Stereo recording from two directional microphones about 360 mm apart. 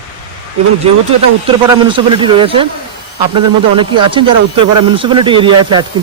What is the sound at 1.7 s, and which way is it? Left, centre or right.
Speech, centre.